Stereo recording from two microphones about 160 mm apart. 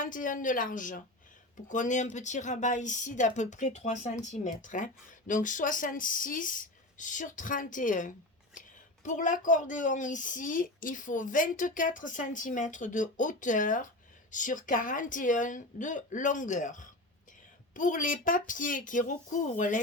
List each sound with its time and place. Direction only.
0.0 s a woman's voice: 55° left (ahead or behind)